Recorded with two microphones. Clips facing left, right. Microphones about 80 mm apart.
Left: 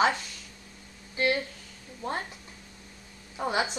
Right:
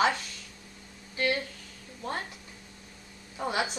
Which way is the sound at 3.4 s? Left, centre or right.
Centre.